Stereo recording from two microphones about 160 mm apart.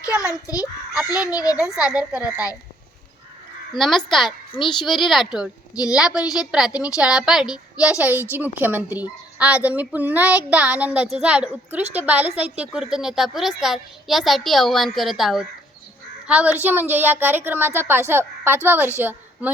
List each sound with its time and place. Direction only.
0.1 s a child's voice: 10° right (ahead or behind)
1.3 s a child's voice: 20° left (ahead or behind)
1.8 s a woman's voice: 5° right (ahead or behind)
3.8 s a woman's voice: centre (ahead or behind)